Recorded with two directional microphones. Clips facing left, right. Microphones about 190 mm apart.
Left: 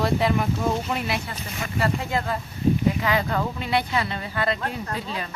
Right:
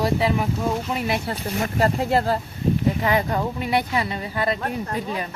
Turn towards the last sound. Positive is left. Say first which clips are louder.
# right 2 dB
turn(degrees=-15)  # may be behind; listen again after turning